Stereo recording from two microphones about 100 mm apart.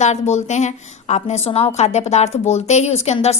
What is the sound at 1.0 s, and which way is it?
A woman's voice, 90° left.